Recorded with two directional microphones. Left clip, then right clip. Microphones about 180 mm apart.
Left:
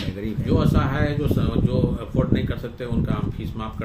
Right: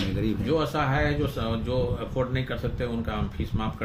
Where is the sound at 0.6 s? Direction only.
10° right (ahead or behind).